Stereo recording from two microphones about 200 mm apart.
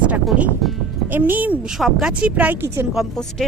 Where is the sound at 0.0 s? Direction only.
5° right (ahead or behind).